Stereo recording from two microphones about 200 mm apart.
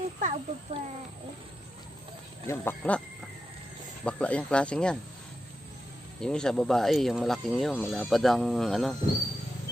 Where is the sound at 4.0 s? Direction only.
5° left (ahead or behind).